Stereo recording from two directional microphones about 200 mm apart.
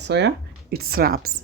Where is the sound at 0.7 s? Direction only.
50° right (ahead or behind).